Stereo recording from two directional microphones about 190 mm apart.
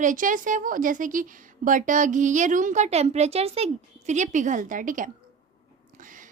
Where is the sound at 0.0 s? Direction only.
45° right (ahead or behind).